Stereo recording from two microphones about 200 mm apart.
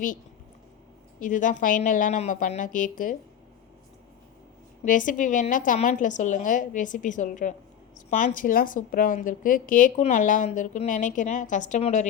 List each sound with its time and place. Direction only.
1.2 s a woman's voice: 40° left (ahead or behind)
4.9 s a woman's voice: 40° left (ahead or behind)